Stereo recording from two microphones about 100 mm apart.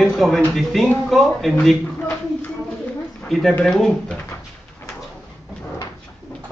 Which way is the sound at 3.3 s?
5° left (ahead or behind).